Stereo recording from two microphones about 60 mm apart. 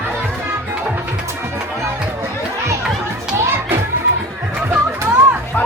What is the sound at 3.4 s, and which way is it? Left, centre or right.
Children playing, right.